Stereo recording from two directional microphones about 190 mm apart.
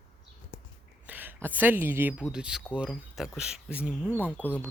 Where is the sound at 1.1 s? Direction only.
10° right (ahead or behind).